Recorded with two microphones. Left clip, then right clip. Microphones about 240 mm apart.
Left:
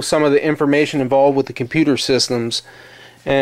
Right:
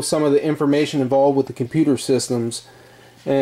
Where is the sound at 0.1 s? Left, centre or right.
Centre.